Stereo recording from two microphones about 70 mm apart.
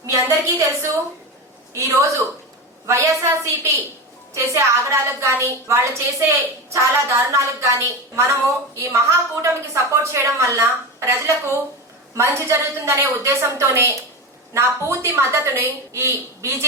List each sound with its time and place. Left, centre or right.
0.1 s a woman's voice: right
9.4 s a woman's voice: right